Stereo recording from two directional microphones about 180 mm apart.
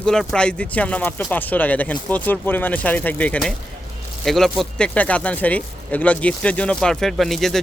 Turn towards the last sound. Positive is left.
turn(degrees=0)  # may be behind; listen again after turning